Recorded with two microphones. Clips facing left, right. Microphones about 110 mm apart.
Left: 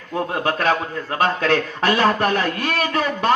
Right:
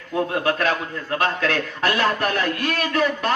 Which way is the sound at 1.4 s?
35° left (ahead or behind).